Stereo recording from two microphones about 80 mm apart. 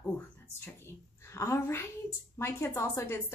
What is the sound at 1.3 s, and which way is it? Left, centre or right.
Speech, left.